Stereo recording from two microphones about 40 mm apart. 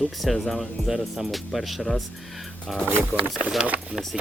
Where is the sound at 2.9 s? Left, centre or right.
Right.